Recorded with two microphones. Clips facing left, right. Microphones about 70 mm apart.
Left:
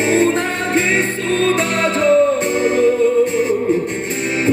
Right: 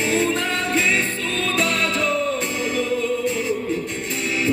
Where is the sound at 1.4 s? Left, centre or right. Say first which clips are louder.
Left 5 dB; left.